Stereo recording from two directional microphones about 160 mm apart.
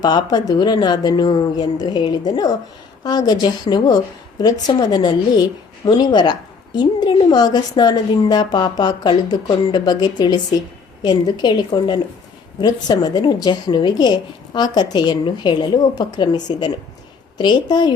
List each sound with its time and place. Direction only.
0.0 s a woman's voice: 25° left (ahead or behind)